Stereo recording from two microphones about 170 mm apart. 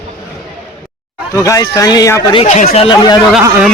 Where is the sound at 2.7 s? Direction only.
30° left (ahead or behind).